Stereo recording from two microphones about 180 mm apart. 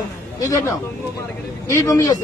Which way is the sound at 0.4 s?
20° left (ahead or behind).